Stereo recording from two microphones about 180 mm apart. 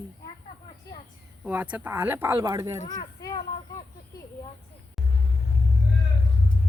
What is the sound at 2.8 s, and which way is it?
Speech, 20° left (ahead or behind).